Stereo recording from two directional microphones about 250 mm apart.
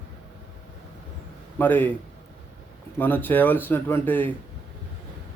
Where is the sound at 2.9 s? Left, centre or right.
Centre.